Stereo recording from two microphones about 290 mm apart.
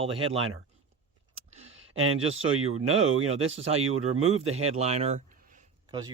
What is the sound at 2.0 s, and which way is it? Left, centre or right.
A man's voice, right.